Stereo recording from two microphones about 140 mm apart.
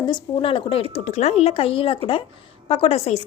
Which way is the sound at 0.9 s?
50° left (ahead or behind).